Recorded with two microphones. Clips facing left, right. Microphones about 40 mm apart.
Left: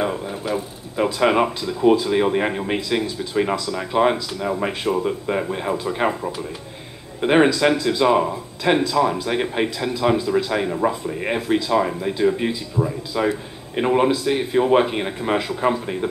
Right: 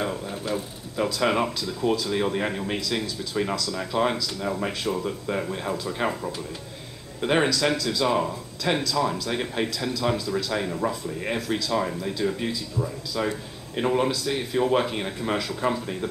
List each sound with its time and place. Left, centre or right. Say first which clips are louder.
0.0 s speech: left 5 dB; left